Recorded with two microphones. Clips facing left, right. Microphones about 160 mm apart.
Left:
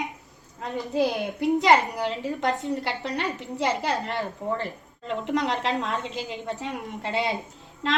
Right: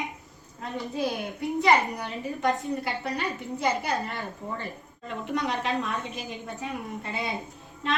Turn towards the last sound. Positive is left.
turn(degrees=90)